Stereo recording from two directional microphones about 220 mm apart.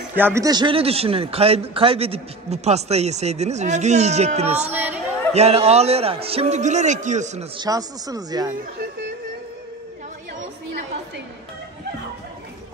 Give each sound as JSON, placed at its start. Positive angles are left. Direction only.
{"t": 0.1, "sound": "a man's voice", "side_deg": -10}
{"t": 4.6, "sound": "speech", "side_deg": -10}
{"t": 5.3, "sound": "a man's voice", "side_deg": -30}
{"t": 7.5, "sound": "speech", "side_deg": -15}